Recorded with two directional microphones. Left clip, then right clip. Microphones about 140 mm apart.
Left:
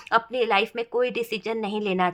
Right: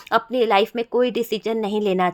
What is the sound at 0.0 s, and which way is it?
Speech, 40° right (ahead or behind).